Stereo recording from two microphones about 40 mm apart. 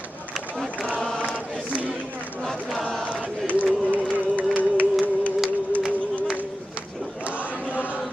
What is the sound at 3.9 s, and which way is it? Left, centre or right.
Music, right.